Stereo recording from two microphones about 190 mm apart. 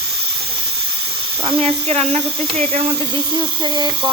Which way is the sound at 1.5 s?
30° right (ahead or behind).